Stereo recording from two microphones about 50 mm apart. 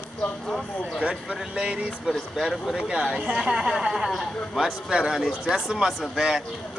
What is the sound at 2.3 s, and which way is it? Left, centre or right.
A man's voice, centre.